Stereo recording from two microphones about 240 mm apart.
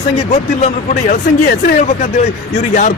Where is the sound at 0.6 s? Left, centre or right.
Left.